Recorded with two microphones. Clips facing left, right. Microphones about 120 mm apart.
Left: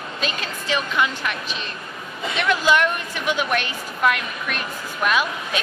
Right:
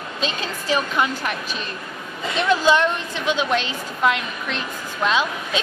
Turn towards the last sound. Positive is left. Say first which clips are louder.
# right 1 dB
turn(degrees=-25)  # may be behind; listen again after turning